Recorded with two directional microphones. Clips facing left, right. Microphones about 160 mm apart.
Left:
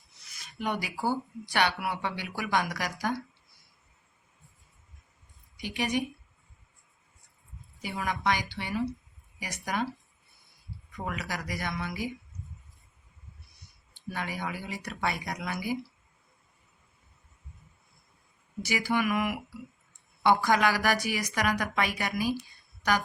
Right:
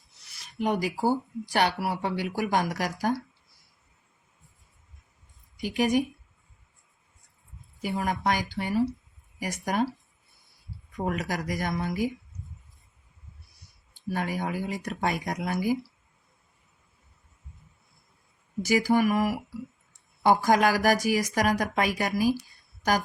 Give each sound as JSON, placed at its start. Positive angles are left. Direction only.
{"t": 0.6, "sound": "speech", "side_deg": -40}
{"t": 5.6, "sound": "speech", "side_deg": -45}
{"t": 7.8, "sound": "speech", "side_deg": -45}
{"t": 10.9, "sound": "speech", "side_deg": -45}
{"t": 14.1, "sound": "speech", "side_deg": -45}
{"t": 18.6, "sound": "speech", "side_deg": -40}
{"t": 22.4, "sound": "a sound", "side_deg": -40}